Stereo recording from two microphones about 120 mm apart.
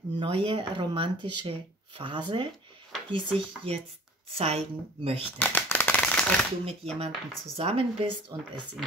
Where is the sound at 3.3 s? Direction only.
50° right (ahead or behind).